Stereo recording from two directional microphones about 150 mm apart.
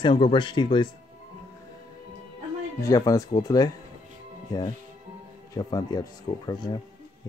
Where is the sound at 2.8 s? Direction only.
25° left (ahead or behind).